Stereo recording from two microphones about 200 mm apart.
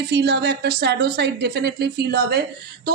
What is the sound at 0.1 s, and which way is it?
A woman's voice, 55° right (ahead or behind).